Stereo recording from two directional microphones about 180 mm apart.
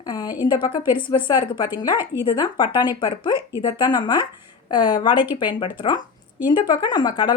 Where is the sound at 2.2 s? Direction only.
25° left (ahead or behind).